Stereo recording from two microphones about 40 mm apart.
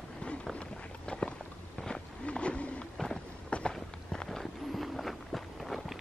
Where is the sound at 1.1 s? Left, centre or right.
Left.